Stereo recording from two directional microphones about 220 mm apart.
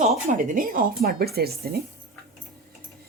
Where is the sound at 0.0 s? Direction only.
35° right (ahead or behind).